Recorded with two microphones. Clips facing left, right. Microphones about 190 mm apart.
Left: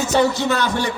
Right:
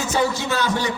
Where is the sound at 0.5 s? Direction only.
60° left (ahead or behind).